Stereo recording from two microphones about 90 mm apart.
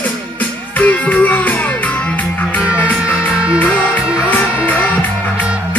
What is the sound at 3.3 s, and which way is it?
Music, 10° right (ahead or behind).